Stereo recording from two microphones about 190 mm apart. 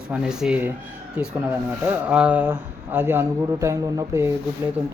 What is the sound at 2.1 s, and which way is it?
Speech, 5° right (ahead or behind).